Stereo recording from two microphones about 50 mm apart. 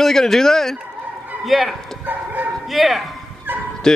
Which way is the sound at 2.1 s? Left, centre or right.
Right.